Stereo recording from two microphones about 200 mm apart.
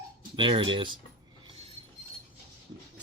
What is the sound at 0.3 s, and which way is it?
Speech, 25° right (ahead or behind).